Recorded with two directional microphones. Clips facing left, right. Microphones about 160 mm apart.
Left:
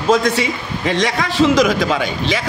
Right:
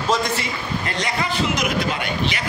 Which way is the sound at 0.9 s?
90° left.